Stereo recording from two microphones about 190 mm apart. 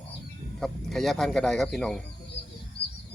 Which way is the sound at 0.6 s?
Centre (ahead or behind).